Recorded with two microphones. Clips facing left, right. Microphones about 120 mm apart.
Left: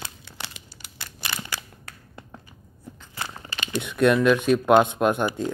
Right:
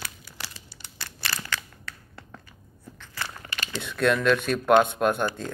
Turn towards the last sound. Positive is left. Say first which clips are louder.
# left 2 dB
turn(degrees=15)  # may be behind; listen again after turning